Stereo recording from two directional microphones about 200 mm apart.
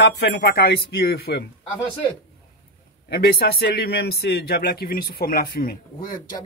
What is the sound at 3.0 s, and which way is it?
A man's voice, 55° left (ahead or behind).